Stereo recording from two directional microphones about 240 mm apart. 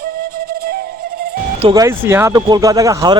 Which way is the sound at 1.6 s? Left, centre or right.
Centre.